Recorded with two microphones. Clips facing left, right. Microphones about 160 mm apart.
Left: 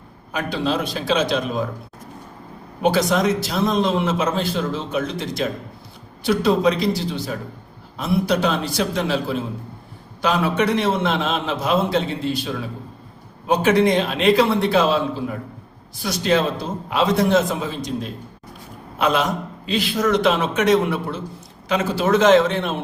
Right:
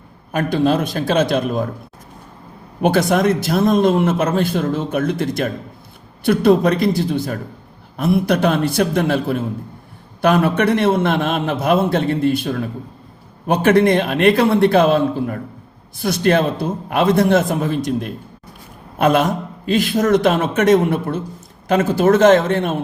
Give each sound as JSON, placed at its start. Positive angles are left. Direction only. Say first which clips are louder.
{"t": 0.3, "sound": "a man's voice", "louder": "right 6 dB", "side_deg": -50}
{"t": 2.8, "sound": "a man's voice", "louder": "right 3 dB", "side_deg": -55}